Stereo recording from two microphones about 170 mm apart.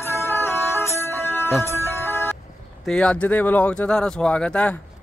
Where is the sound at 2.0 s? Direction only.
15° left (ahead or behind).